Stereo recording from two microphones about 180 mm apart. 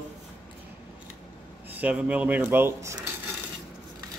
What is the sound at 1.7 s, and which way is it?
A man's voice, 10° right (ahead or behind).